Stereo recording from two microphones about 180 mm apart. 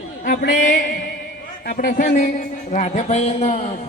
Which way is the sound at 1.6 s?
60° left (ahead or behind).